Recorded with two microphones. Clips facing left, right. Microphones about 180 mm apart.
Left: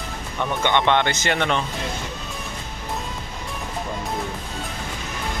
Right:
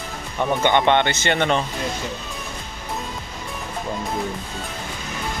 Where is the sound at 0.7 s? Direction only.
35° right (ahead or behind).